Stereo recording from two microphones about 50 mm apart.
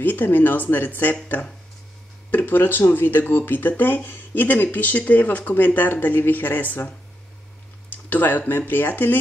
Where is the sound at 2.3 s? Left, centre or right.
Left.